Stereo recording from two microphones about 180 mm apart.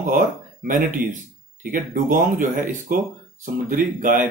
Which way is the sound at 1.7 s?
50° right (ahead or behind).